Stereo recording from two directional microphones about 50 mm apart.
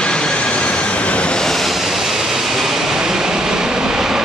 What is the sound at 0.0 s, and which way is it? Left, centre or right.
Vehicle, centre.